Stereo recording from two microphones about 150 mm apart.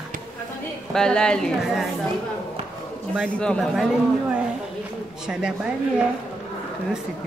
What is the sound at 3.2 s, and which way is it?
Speech, 5° left (ahead or behind).